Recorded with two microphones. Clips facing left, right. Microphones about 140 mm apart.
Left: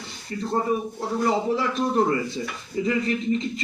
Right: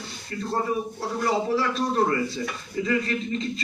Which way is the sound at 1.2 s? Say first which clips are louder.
Left 1 dB; 20° left (ahead or behind).